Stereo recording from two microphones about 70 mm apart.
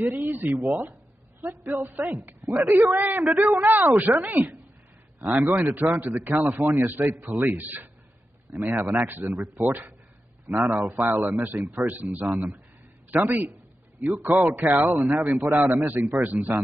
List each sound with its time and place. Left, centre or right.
0.0 s a man's voice: right
2.5 s speech: right
3.0 s a man's voice: right